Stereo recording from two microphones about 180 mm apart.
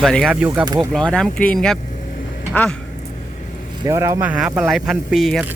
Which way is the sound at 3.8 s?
15° right (ahead or behind).